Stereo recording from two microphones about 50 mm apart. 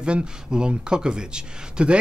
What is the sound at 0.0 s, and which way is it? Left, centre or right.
Speech, centre.